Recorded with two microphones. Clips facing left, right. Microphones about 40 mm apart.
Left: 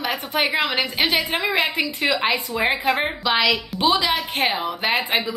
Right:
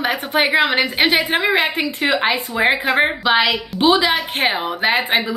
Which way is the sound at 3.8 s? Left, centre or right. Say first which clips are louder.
Right 6 dB; right.